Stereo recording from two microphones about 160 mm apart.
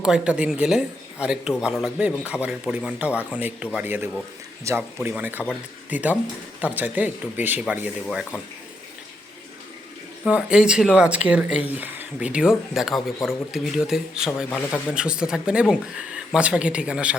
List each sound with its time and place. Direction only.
0.0 s a man's voice: 5° right (ahead or behind)
10.2 s speech: 5° right (ahead or behind)